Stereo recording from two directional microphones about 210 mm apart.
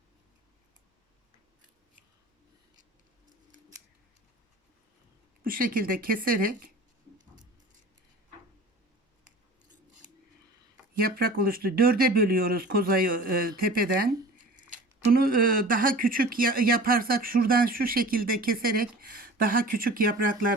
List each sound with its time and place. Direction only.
5.4 s speech: 45° right (ahead or behind)
11.0 s speech: 45° right (ahead or behind)